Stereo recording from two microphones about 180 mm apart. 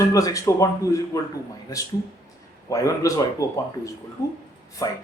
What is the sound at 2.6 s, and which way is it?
A man's voice, 20° left (ahead or behind).